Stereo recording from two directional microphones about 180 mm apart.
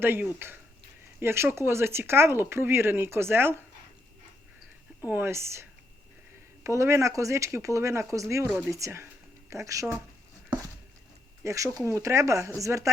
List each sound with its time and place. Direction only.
0.0 s speech: 10° right (ahead or behind)
5.0 s speech: 10° right (ahead or behind)
11.4 s speech: 15° right (ahead or behind)